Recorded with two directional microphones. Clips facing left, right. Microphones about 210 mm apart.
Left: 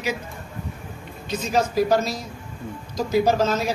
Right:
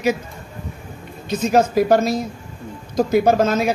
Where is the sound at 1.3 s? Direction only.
55° right (ahead or behind).